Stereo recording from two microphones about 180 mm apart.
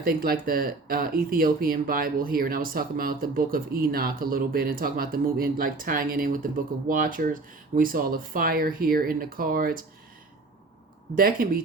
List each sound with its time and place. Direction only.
0.0 s speech: 55° right (ahead or behind)
11.2 s speech: 55° right (ahead or behind)